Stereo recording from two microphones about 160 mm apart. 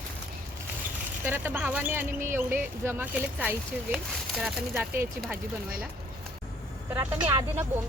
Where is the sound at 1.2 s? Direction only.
10° right (ahead or behind).